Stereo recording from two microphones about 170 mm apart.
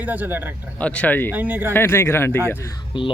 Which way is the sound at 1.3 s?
10° right (ahead or behind).